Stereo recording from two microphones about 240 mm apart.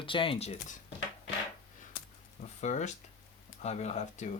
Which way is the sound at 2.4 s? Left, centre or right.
Left.